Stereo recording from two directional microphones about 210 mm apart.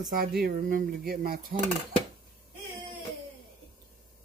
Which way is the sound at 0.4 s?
40° right (ahead or behind).